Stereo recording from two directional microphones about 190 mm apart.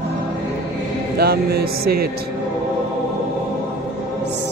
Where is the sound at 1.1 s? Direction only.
55° right (ahead or behind).